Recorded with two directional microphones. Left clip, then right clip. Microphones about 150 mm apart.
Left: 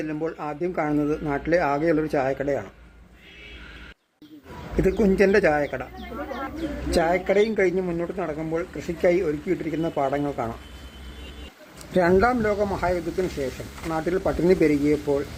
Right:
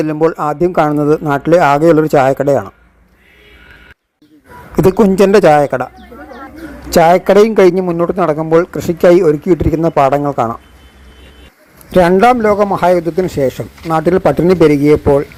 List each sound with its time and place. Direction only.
0.0 s a man's voice: 55° right (ahead or behind)
4.9 s a man's voice: 50° right (ahead or behind)
6.1 s a sound: 25° right (ahead or behind)
6.9 s a man's voice: 55° right (ahead or behind)
11.9 s a man's voice: 50° right (ahead or behind)